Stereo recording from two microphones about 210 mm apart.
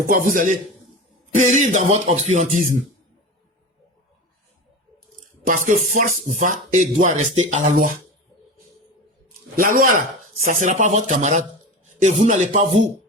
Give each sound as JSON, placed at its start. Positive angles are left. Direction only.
{"t": 0.1, "sound": "speech", "side_deg": -40}
{"t": 5.5, "sound": "speech", "side_deg": -35}
{"t": 9.6, "sound": "speech", "side_deg": -40}